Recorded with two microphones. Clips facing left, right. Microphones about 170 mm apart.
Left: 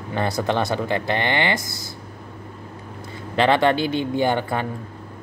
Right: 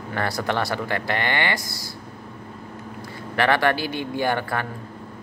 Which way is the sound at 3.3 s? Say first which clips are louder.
Left 3 dB; 20° left (ahead or behind).